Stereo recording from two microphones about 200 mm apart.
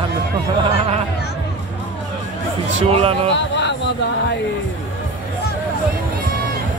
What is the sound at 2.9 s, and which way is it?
Speech, 30° right (ahead or behind).